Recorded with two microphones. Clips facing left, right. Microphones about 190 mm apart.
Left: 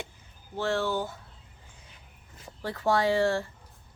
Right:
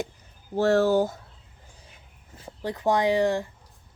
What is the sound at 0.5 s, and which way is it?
Speech, 40° right (ahead or behind).